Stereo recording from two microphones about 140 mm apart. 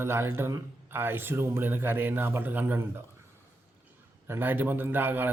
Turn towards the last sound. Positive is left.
turn(degrees=-15)  # may be behind; listen again after turning